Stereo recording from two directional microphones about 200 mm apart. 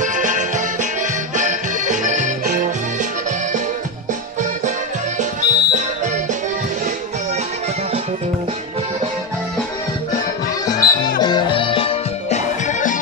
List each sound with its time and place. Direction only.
0.0 s music: 40° right (ahead or behind)
5.4 s music: 35° right (ahead or behind)
10.6 s music: 20° left (ahead or behind); by 13.0 s 40° left (ahead or behind)